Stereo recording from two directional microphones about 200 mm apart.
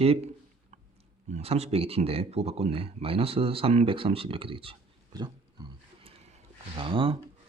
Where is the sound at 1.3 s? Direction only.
30° right (ahead or behind).